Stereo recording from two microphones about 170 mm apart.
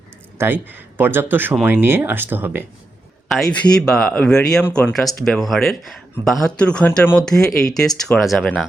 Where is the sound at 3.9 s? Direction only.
5° left (ahead or behind).